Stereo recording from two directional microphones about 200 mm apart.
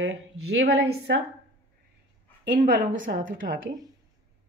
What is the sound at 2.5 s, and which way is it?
Speech, 40° right (ahead or behind).